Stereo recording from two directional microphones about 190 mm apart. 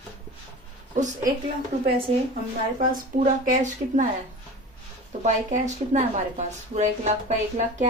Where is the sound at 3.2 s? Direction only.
40° right (ahead or behind).